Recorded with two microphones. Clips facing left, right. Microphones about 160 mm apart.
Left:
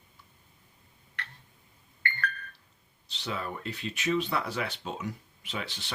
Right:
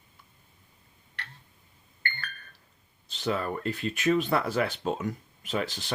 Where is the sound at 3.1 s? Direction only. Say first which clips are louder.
Right 6 dB; 45° right (ahead or behind).